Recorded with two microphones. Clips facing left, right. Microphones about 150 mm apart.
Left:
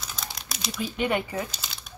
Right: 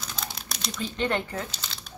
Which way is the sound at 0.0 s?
Centre (ahead or behind).